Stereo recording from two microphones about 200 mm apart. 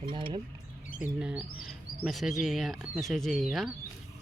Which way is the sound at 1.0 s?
5° right (ahead or behind).